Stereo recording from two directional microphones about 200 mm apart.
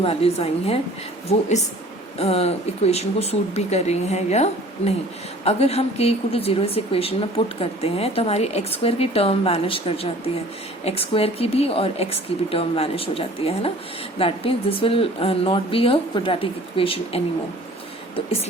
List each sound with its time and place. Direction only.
0.0 s a woman's voice: 30° left (ahead or behind)